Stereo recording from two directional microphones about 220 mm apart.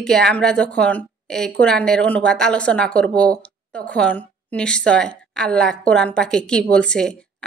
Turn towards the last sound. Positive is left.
turn(degrees=5)  # may be behind; listen again after turning